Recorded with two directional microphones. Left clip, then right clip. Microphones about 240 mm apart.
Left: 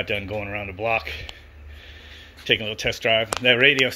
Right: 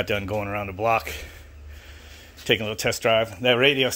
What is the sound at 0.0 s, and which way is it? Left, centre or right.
Speech, centre.